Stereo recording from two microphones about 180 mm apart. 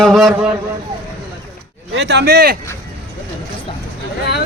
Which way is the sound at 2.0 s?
70° right (ahead or behind).